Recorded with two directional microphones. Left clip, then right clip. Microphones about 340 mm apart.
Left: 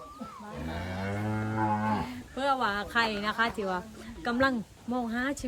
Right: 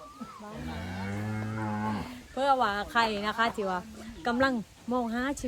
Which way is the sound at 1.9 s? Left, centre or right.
Centre.